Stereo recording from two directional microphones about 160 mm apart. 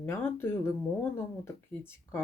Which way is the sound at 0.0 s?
15° left (ahead or behind).